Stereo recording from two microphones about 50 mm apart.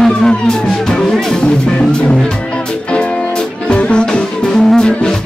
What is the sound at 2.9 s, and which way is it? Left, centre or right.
Music, left.